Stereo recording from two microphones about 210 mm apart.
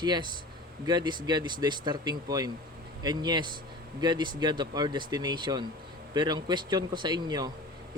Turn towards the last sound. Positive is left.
turn(degrees=-20)  # may be behind; listen again after turning